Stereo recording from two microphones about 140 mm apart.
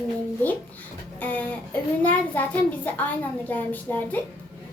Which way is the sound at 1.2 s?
10° left (ahead or behind).